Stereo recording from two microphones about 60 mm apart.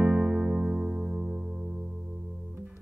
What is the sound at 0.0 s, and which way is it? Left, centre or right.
Electric piano, right.